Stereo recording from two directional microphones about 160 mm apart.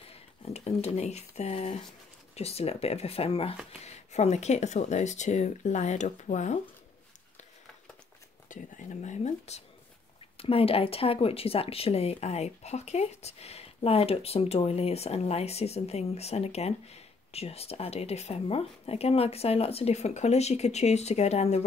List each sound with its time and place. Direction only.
0.1 s speech: 40° left (ahead or behind)
8.5 s speech: 50° left (ahead or behind)